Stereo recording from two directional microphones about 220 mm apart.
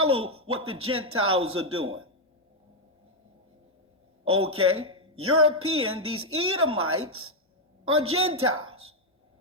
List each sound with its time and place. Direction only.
0.0 s speech: 75° right (ahead or behind)
4.3 s speech: 75° right (ahead or behind)